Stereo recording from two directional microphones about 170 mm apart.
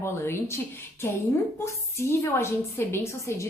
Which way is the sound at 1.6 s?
15° left (ahead or behind).